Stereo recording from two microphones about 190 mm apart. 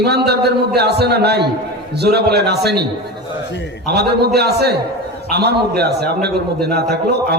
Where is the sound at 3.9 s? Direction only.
60° right (ahead or behind).